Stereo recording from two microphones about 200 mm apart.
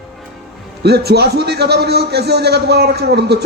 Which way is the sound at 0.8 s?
55° right (ahead or behind).